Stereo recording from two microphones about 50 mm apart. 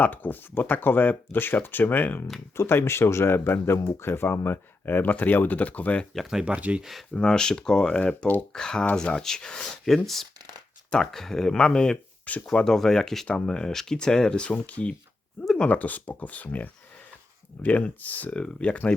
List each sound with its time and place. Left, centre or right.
0.0 s speech: left
2.6 s speech: left
6.4 s speech: right
7.1 s speech: centre
12.3 s speech: left
12.6 s speech: centre
14.5 s speech: left